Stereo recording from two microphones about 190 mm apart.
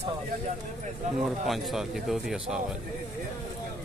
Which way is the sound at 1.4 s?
Centre (ahead or behind).